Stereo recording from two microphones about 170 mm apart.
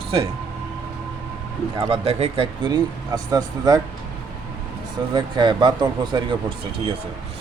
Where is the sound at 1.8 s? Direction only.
35° right (ahead or behind).